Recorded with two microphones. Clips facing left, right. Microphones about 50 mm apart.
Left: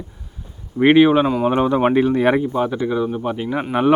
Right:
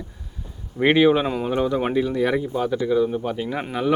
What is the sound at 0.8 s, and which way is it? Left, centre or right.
Speech, centre.